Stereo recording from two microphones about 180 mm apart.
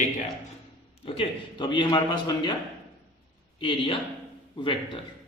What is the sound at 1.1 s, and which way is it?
A man's voice, 30° left (ahead or behind).